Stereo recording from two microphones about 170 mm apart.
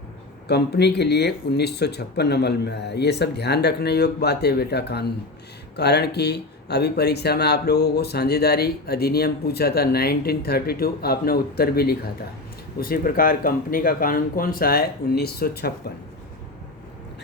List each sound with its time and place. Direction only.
0.4 s speech: 75° left (ahead or behind)